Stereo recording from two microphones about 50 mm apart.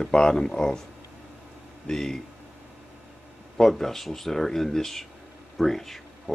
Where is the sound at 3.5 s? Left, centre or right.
Centre.